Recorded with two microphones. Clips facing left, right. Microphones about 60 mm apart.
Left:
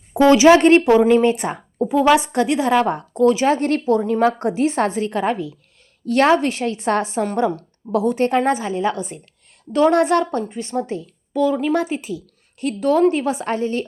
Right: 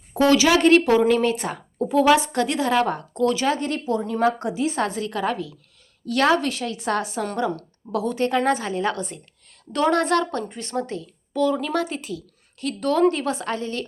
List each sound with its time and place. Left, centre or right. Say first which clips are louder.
0.1 s a woman's voice: left 6 dB; left
0.9 s a woman's voice: left 5 dB; centre
3.4 s a woman's voice: left 5 dB; left
3.7 s a woman's voice: left 7 dB; left
8.4 s a woman's voice: left 3 dB; centre
10.4 s a woman's voice: left 4 dB; centre; by 13.8 s left